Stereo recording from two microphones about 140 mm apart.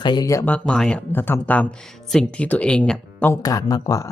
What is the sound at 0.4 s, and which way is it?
Speech, 10° left (ahead or behind).